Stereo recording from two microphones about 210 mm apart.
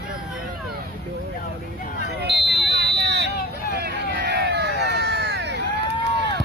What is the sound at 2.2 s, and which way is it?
Smoke detector, 55° right (ahead or behind).